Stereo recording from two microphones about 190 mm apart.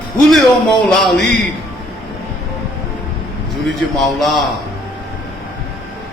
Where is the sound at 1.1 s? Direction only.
65° left (ahead or behind).